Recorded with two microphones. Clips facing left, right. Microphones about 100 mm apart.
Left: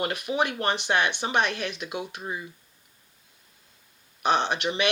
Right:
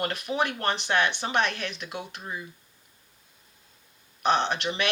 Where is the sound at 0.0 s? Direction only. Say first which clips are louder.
Left 1 dB; 15° left (ahead or behind).